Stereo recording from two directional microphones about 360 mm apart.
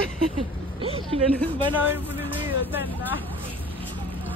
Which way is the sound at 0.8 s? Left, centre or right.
Centre.